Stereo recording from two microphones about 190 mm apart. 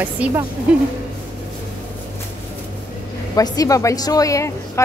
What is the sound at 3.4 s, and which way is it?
A woman's voice, 20° left (ahead or behind).